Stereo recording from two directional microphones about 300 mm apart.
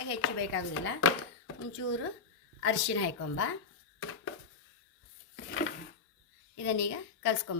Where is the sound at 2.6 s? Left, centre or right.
Left.